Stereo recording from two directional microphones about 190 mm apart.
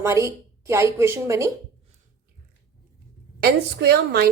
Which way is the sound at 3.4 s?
55° right (ahead or behind).